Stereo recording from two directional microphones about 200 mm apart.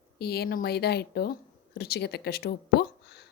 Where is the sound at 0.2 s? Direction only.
50° left (ahead or behind).